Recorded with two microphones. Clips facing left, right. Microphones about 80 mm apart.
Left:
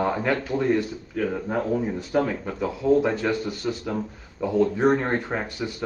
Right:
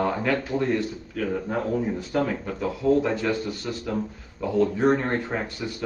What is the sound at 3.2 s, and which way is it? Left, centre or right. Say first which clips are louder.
Speech: left 1 dB; centre.